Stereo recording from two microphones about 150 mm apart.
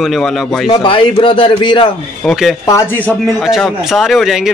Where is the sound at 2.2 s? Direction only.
Centre (ahead or behind).